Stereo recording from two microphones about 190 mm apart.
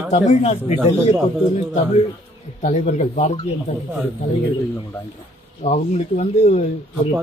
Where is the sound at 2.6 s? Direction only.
40° left (ahead or behind).